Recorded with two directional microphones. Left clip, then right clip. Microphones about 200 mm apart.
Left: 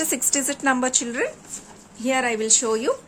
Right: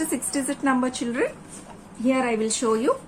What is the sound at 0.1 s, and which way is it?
A woman's voice, 35° left (ahead or behind).